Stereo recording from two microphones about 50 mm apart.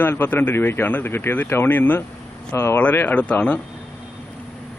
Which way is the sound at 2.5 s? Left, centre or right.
Left.